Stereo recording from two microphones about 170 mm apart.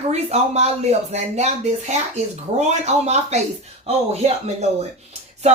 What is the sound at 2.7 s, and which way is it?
Speech, 40° right (ahead or behind).